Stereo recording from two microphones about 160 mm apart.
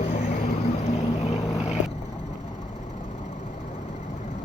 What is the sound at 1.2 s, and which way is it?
Vehicle, 45° left (ahead or behind).